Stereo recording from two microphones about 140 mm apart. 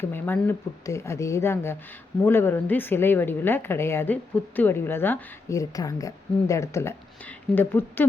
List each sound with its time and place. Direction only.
0.1 s speech: 15° left (ahead or behind)